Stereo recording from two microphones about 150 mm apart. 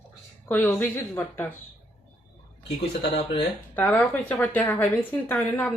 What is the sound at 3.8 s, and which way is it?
Speech, 10° left (ahead or behind).